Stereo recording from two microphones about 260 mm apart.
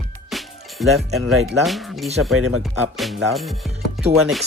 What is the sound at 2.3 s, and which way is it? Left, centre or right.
Speech, right.